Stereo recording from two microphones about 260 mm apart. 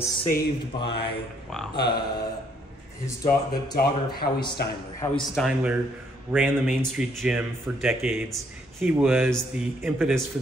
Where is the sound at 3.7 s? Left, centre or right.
Left.